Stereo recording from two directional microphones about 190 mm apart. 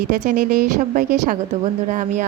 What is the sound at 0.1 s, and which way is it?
A woman's voice, 45° right (ahead or behind).